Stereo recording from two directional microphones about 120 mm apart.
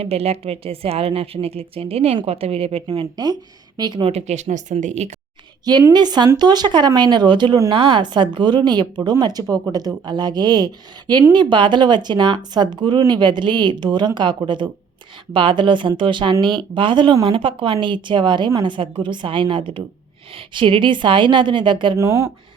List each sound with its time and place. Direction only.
0.0 s a woman's voice: 60° right (ahead or behind)
3.8 s speech: 35° right (ahead or behind)
4.0 s speech: 65° right (ahead or behind)
5.9 s a woman's voice: 35° right (ahead or behind)
21.9 s speech: 25° right (ahead or behind)